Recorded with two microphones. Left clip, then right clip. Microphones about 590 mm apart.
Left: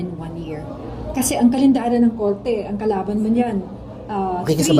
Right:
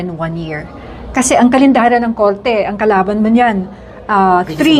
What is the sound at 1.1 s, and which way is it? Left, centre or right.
A woman's voice, right.